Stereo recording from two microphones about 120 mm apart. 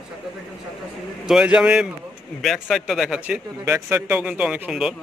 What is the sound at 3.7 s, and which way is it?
Speech, 20° right (ahead or behind).